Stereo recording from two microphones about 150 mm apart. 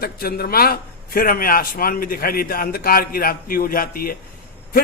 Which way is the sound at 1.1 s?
75° left (ahead or behind).